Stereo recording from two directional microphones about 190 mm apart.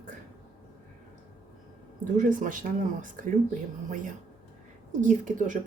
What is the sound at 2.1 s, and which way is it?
Speech, 45° right (ahead or behind).